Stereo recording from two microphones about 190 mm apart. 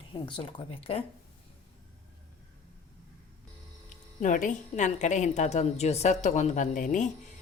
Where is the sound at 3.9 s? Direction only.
45° left (ahead or behind).